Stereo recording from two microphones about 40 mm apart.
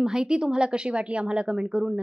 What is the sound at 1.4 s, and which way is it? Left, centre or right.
Speech, centre.